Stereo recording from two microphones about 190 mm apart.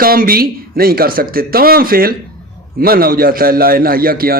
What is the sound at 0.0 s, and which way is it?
A man's voice, 50° right (ahead or behind).